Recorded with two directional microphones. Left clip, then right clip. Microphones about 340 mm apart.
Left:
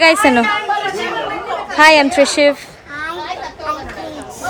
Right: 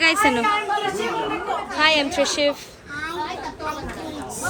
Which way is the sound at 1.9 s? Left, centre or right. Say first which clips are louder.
Left 9 dB; left.